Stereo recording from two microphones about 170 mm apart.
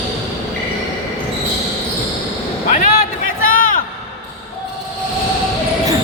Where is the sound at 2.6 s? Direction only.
50° left (ahead or behind).